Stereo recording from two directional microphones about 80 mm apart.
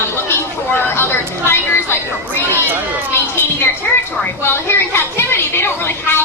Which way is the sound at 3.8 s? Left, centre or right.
Left.